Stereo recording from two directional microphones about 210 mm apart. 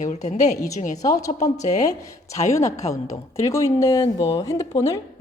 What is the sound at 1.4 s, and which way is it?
Speech, 15° left (ahead or behind).